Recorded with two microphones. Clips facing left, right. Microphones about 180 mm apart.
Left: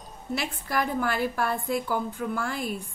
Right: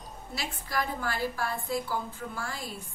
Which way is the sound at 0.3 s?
55° left (ahead or behind).